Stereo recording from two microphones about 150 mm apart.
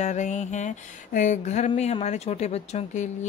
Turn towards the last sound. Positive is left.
turn(degrees=45)  # may be behind; listen again after turning